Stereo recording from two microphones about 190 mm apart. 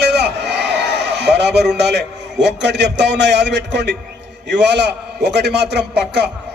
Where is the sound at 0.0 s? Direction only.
60° right (ahead or behind).